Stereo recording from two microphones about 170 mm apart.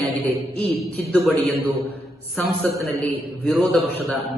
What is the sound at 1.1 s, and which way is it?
A man's voice, 10° left (ahead or behind).